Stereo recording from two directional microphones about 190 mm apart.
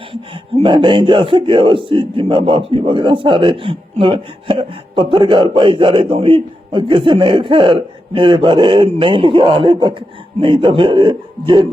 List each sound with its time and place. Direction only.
0.1 s speech: 30° right (ahead or behind)